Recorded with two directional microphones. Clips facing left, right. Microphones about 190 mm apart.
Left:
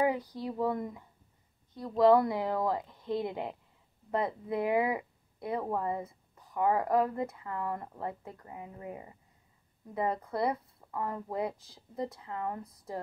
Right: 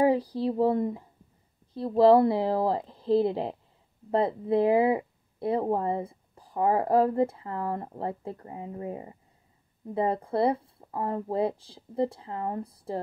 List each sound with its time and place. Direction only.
0.0 s speech: 30° right (ahead or behind)